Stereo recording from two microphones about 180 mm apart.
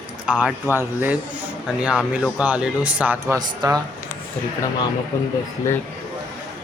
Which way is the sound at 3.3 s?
20° right (ahead or behind).